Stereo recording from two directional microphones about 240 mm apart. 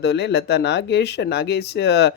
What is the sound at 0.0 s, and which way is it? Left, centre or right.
Speech, left.